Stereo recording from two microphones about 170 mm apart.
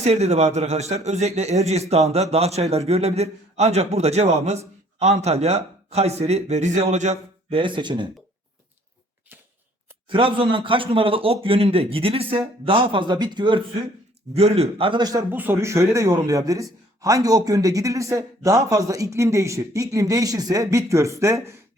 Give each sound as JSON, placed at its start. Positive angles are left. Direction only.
{"t": 0.0, "sound": "speech", "side_deg": -40}
{"t": 7.6, "sound": "speech", "side_deg": -25}
{"t": 10.1, "sound": "speech", "side_deg": -30}
{"t": 15.3, "sound": "speech", "side_deg": -10}